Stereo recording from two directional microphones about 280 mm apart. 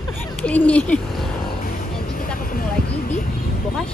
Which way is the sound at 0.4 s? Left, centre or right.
Centre.